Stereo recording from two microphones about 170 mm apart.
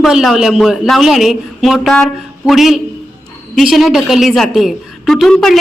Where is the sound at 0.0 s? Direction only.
Centre (ahead or behind).